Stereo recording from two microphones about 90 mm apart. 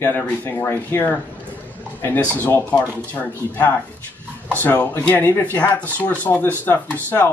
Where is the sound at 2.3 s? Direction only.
25° left (ahead or behind).